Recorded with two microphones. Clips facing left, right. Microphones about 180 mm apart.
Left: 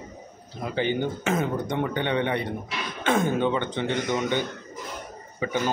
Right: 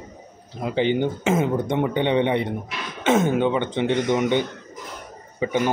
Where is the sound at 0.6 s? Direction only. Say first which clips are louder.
Right 5 dB; 20° right (ahead or behind).